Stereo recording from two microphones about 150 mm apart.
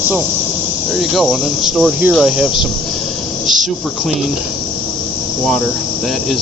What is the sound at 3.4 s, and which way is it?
Insect, centre (ahead or behind).